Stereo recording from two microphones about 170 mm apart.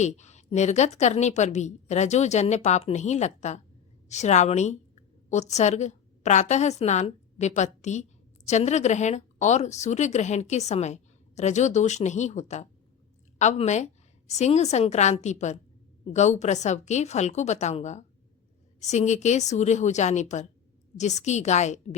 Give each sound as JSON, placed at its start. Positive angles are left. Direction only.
{"t": 0.0, "sound": "a woman's voice", "side_deg": 45}